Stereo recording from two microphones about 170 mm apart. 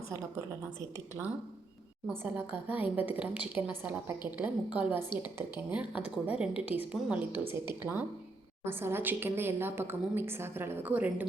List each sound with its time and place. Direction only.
0.3 s a woman's voice: 15° right (ahead or behind)